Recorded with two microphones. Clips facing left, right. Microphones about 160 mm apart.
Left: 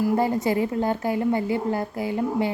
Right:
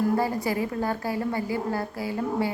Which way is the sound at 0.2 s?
20° left (ahead or behind).